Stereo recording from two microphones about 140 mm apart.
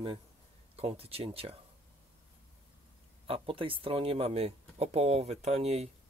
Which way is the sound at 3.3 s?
40° right (ahead or behind).